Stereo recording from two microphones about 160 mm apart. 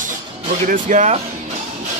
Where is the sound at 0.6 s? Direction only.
55° right (ahead or behind).